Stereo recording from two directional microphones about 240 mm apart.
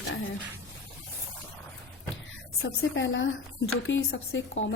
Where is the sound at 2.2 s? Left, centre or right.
Left.